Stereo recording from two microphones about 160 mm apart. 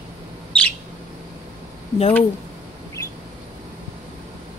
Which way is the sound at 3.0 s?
20° left (ahead or behind).